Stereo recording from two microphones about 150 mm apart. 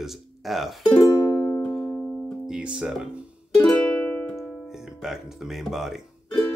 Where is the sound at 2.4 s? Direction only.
5° right (ahead or behind).